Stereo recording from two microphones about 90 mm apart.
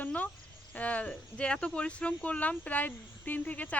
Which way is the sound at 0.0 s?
20° left (ahead or behind).